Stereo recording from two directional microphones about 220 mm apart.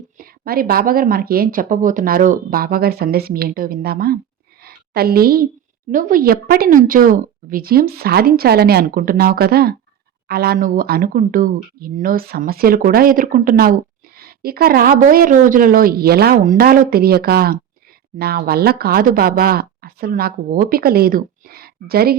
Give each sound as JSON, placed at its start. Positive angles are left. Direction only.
{"t": 0.2, "sound": "speech", "side_deg": -40}
{"t": 4.6, "sound": "a sound", "side_deg": -45}
{"t": 5.9, "sound": "speech", "side_deg": -40}